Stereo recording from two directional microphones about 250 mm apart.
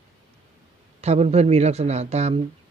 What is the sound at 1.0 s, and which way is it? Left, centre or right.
Speech, right.